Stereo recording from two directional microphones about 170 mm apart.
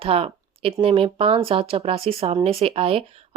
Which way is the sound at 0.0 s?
35° right (ahead or behind).